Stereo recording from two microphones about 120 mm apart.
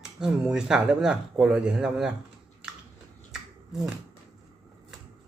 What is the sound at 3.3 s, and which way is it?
Finger snapping, 5° right (ahead or behind).